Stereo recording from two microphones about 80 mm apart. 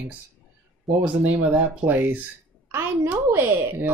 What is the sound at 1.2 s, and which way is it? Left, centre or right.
A woman's voice, right.